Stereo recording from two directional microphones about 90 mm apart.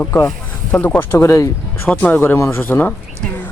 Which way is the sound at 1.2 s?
35° left (ahead or behind).